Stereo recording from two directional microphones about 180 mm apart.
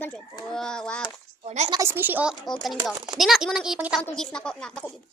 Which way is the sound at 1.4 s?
40° right (ahead or behind).